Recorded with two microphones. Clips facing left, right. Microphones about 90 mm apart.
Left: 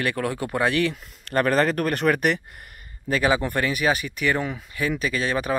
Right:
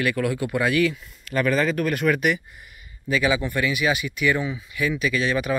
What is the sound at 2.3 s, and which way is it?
Speech, 60° left (ahead or behind).